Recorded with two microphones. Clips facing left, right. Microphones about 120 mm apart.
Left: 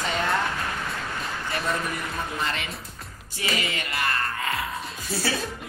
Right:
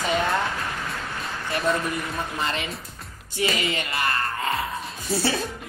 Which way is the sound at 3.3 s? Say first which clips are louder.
Right 4 dB; 25° right (ahead or behind).